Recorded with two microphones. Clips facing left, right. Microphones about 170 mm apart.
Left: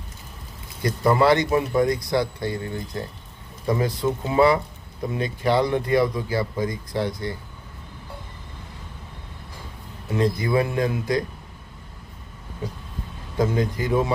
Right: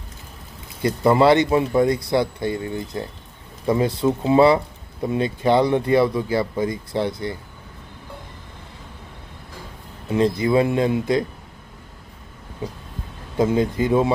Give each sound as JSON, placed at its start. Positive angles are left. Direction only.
{"t": 0.8, "sound": "speech", "side_deg": -25}
{"t": 10.1, "sound": "speech", "side_deg": -25}
{"t": 13.4, "sound": "speech", "side_deg": -25}